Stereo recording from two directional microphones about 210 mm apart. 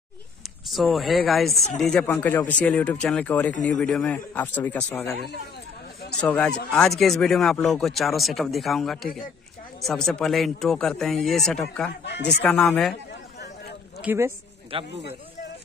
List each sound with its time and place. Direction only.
0.7 s speech: centre (ahead or behind)
6.2 s speech: 5° left (ahead or behind)
13.4 s a sound: 50° left (ahead or behind)
14.0 s speech: 10° right (ahead or behind)
14.7 s speech: 25° right (ahead or behind)